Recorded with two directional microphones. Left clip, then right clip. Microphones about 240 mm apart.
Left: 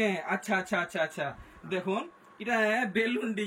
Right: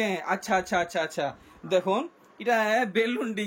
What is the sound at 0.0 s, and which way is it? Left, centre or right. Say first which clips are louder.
Speech: right 2 dB; centre.